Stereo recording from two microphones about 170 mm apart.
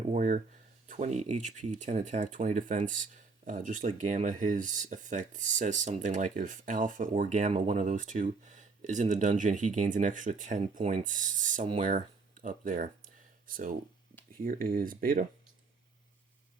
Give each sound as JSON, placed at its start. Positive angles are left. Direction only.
{"t": 0.1, "sound": "speech", "side_deg": -45}